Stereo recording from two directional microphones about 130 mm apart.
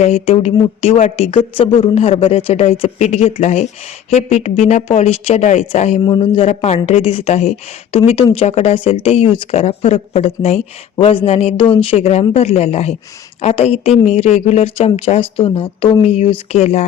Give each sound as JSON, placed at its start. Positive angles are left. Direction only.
{"t": 0.0, "sound": "speech", "side_deg": 55}
{"t": 6.0, "sound": "speech", "side_deg": 35}
{"t": 6.5, "sound": "speech", "side_deg": 55}